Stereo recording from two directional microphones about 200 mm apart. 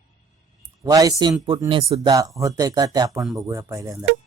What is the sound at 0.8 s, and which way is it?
Speech, 20° right (ahead or behind).